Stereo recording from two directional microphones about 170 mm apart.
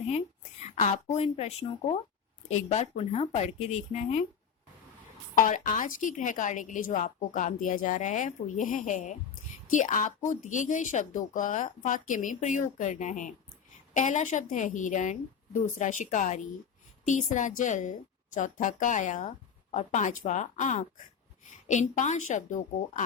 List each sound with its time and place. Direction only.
1.1 s speech: 40° left (ahead or behind)
5.3 s a woman's voice: 50° left (ahead or behind)